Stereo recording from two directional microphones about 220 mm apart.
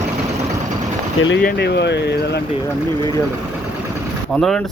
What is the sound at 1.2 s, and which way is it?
Speech, 55° left (ahead or behind).